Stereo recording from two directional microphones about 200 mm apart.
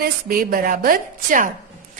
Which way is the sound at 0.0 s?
45° right (ahead or behind).